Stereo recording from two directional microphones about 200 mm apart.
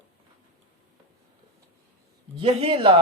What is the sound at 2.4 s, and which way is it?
Speech, 30° right (ahead or behind).